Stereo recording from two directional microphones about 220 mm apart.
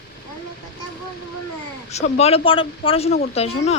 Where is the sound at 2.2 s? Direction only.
25° left (ahead or behind).